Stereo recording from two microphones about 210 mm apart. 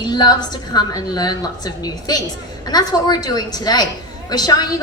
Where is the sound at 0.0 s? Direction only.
20° left (ahead or behind).